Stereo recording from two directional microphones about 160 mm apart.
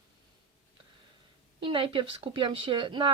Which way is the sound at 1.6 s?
30° right (ahead or behind).